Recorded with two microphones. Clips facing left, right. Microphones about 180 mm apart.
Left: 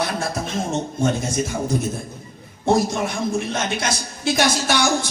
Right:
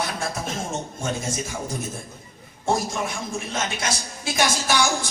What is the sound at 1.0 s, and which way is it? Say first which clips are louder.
Speech: left 8 dB; 65° left (ahead or behind).